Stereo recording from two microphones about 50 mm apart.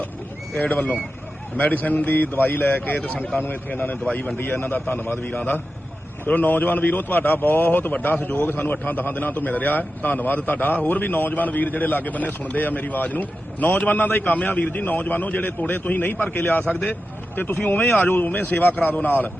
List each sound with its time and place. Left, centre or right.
0.5 s a man's voice: left
5.2 s a man's voice: left